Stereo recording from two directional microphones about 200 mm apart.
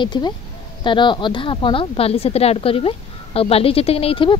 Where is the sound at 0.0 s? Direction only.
20° left (ahead or behind).